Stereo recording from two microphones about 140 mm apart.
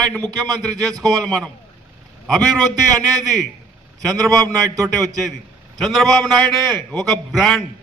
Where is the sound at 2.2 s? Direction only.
5° left (ahead or behind).